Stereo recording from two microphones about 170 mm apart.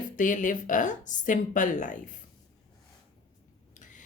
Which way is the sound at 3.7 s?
50° left (ahead or behind).